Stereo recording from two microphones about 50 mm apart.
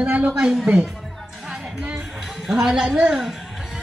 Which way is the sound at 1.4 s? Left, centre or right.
Centre.